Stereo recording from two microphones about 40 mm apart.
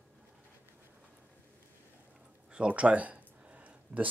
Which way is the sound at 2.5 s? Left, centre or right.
Right.